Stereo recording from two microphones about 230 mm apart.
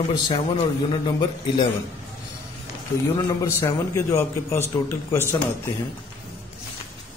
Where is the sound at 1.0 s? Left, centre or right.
Centre.